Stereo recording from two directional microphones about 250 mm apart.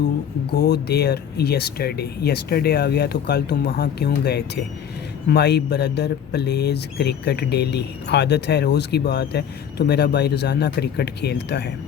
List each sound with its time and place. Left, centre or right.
0.5 s speech: left